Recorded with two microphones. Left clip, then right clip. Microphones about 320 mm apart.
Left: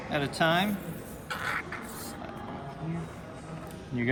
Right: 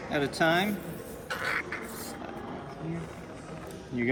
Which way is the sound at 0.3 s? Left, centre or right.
Left.